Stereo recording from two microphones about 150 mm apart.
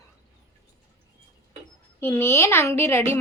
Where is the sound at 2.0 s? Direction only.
15° left (ahead or behind).